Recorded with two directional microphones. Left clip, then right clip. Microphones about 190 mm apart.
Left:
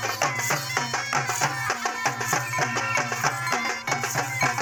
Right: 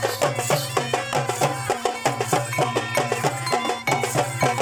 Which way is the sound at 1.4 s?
40° right (ahead or behind).